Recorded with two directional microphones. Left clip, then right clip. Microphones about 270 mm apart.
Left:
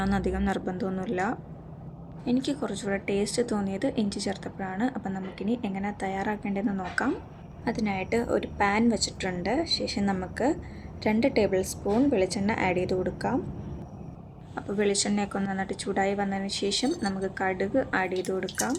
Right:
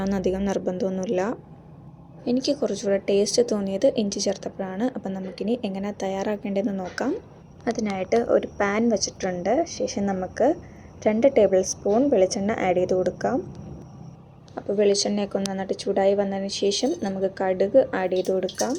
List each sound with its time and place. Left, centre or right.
0.0 s speech: centre
14.5 s speech: centre